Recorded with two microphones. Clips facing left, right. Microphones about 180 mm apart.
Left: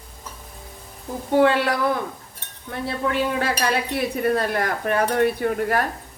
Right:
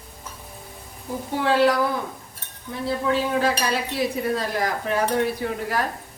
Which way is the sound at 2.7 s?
65° left (ahead or behind).